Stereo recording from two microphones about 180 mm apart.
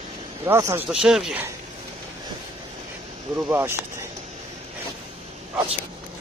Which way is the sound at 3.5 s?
15° right (ahead or behind).